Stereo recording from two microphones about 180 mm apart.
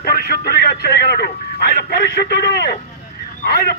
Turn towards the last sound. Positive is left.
turn(degrees=60)  # may be behind; listen again after turning